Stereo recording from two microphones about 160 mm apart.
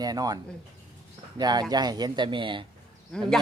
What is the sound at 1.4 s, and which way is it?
Speech, 25° right (ahead or behind).